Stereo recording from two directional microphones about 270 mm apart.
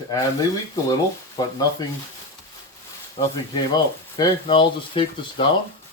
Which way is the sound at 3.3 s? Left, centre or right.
Centre.